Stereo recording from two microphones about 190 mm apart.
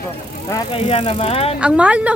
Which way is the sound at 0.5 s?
30° left (ahead or behind).